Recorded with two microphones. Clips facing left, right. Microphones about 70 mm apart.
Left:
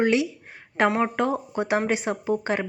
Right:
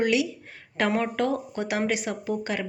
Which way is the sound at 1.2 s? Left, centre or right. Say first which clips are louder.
Left 2 dB; left.